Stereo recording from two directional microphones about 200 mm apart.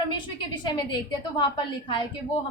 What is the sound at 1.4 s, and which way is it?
Speech, 20° left (ahead or behind).